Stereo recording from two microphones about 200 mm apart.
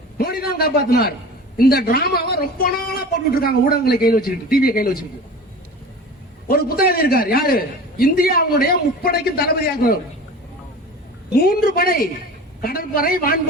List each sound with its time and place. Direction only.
0.2 s a man's voice: 50° left (ahead or behind)
6.5 s a man's voice: 50° left (ahead or behind)
11.3 s a man's voice: 50° left (ahead or behind)